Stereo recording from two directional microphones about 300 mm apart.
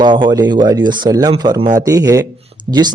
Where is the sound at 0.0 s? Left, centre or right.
Centre.